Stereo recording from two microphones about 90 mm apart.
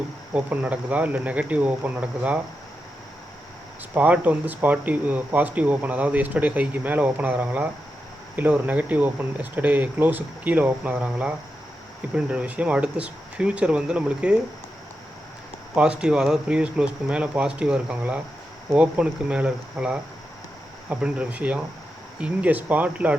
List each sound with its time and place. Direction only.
0.3 s speech: 15° right (ahead or behind)
3.9 s speech: 20° right (ahead or behind)
15.7 s speech: 10° right (ahead or behind)